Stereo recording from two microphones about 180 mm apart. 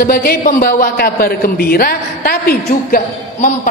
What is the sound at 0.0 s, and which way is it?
A man's voice, 60° left (ahead or behind).